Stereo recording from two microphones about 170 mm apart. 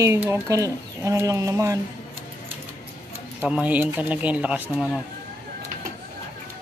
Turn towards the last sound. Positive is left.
turn(degrees=-10)  # may be behind; listen again after turning